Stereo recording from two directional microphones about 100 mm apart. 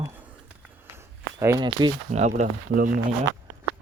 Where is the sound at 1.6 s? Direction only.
50° right (ahead or behind).